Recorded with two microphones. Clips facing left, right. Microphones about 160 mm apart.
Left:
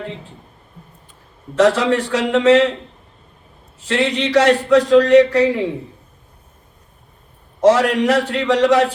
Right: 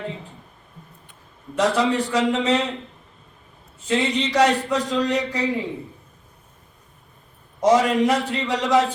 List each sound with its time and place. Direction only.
1.5 s a man's voice: 75° left (ahead or behind)
3.8 s a man's voice: 75° left (ahead or behind)
7.6 s a man's voice: 75° left (ahead or behind)